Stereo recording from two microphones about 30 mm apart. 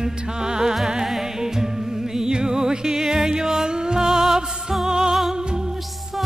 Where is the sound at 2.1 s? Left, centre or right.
Right.